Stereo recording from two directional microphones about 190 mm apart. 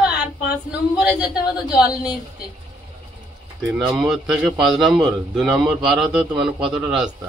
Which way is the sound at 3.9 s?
5° right (ahead or behind).